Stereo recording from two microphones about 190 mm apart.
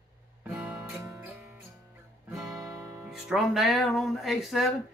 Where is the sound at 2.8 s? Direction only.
20° right (ahead or behind).